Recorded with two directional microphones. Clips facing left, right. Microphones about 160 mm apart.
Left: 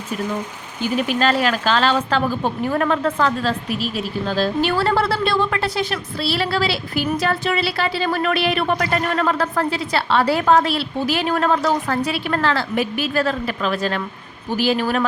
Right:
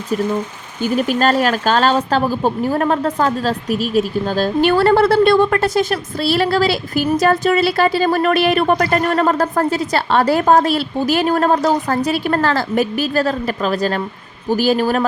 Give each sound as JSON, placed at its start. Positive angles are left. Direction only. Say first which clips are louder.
{"t": 0.8, "sound": "speech", "louder": "right 3 dB", "side_deg": -45}